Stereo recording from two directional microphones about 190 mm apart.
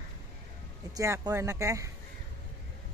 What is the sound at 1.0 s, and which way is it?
Speech, 15° right (ahead or behind).